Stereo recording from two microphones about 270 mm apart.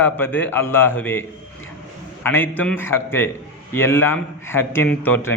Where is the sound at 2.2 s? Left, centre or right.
Centre.